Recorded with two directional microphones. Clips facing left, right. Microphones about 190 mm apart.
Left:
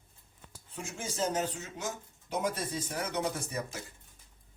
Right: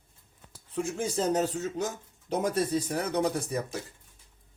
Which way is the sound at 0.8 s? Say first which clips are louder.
Right 6 dB; 35° right (ahead or behind).